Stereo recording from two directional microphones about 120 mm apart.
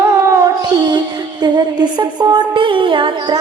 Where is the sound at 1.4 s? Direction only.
40° right (ahead or behind).